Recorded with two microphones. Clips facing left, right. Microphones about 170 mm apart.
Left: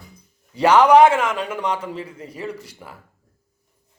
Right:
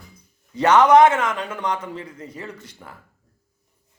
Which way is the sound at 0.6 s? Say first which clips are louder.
Left 1 dB; 10° left (ahead or behind).